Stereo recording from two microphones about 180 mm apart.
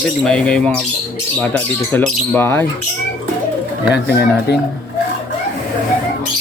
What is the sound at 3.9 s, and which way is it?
Speech, 65° left (ahead or behind).